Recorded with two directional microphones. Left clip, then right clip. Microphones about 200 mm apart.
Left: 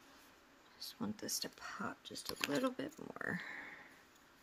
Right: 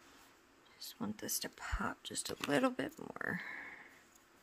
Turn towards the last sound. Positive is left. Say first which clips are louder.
# right 2 dB
turn(degrees=-10)  # may be behind; listen again after turning